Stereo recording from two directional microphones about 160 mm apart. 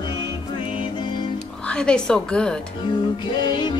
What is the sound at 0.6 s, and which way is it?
Music, 35° left (ahead or behind).